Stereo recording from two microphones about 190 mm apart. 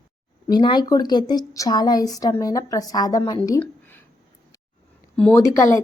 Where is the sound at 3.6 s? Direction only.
10° left (ahead or behind).